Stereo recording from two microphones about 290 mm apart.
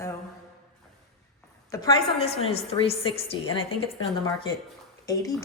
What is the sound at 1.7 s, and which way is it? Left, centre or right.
A woman's voice, centre.